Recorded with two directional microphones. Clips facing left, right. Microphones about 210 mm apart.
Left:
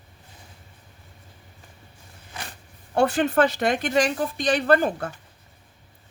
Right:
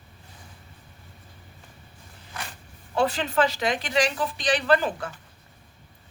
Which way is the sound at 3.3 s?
45° left (ahead or behind).